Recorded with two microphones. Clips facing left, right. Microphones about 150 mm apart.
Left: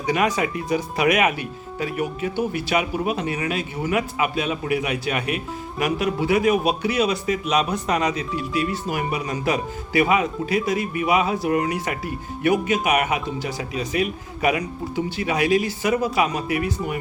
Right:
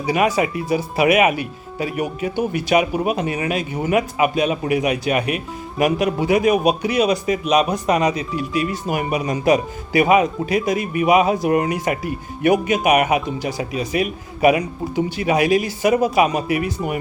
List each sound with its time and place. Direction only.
0.0 s a man's voice: 10° right (ahead or behind)